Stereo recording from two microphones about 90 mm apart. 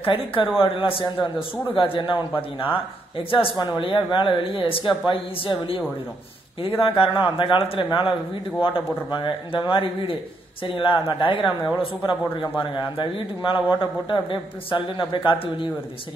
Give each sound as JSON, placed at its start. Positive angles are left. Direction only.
{"t": 0.0, "sound": "speech", "side_deg": 75}
{"t": 3.5, "sound": "speech", "side_deg": 55}
{"t": 6.8, "sound": "a man's voice", "side_deg": 70}